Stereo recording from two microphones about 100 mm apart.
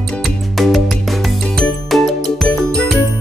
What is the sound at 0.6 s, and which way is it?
Music, centre (ahead or behind).